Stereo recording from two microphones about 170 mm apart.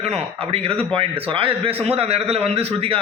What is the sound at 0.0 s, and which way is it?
A man's voice, 35° right (ahead or behind).